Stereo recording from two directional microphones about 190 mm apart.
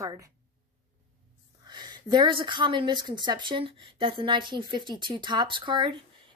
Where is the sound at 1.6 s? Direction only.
25° right (ahead or behind).